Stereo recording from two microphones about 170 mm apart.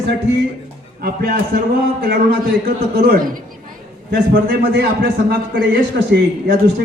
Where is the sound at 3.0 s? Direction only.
55° right (ahead or behind).